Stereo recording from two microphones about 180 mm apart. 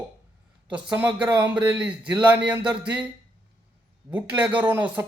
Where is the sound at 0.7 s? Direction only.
5° right (ahead or behind).